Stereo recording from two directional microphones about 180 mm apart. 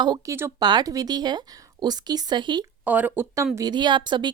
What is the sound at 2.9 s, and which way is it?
Speech, 10° right (ahead or behind).